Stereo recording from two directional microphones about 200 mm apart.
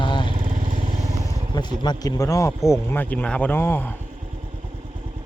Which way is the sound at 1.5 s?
20° left (ahead or behind).